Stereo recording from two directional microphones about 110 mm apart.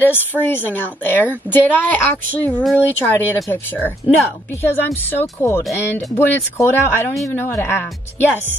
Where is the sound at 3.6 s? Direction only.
15° left (ahead or behind).